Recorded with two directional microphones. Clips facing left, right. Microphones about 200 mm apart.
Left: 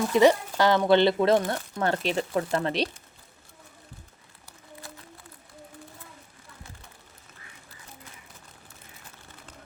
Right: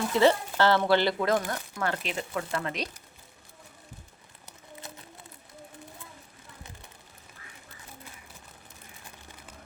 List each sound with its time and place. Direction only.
0.1 s speech: 15° left (ahead or behind)
1.5 s speech: 35° left (ahead or behind)
4.8 s a sound: 20° right (ahead or behind)